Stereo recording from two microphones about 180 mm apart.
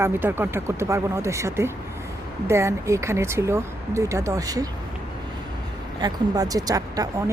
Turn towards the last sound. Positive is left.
turn(degrees=-20)  # may be behind; listen again after turning